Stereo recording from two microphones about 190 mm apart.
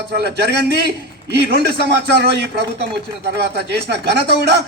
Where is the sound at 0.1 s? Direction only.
60° right (ahead or behind).